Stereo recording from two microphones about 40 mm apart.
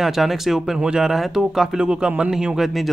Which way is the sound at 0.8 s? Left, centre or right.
Right.